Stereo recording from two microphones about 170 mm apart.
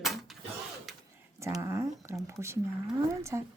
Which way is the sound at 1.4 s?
15° right (ahead or behind).